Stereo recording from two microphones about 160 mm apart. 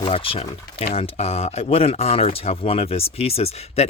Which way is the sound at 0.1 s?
40° left (ahead or behind).